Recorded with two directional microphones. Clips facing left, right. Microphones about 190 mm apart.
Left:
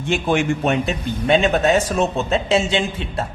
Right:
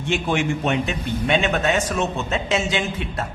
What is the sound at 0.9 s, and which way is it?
A man's voice, 35° left (ahead or behind).